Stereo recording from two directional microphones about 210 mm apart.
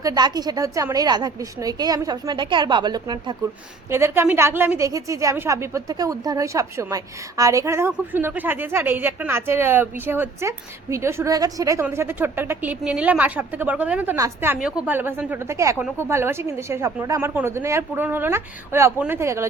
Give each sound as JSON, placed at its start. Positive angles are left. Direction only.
{"t": 0.0, "sound": "a woman's voice", "side_deg": -20}